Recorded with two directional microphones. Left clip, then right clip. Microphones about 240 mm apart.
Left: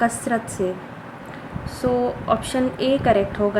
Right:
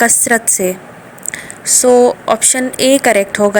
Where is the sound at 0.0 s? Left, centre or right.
Right.